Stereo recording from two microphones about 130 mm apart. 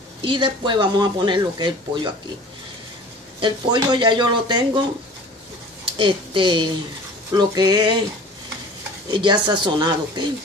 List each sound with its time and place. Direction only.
0.2 s speech: 40° right (ahead or behind)
3.3 s speech: 40° right (ahead or behind)
5.9 s speech: 40° right (ahead or behind)
9.1 s speech: 35° right (ahead or behind)